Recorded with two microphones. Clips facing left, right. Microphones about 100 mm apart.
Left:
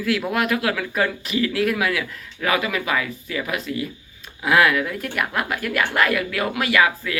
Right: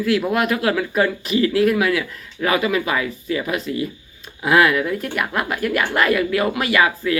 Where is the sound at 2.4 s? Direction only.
25° right (ahead or behind).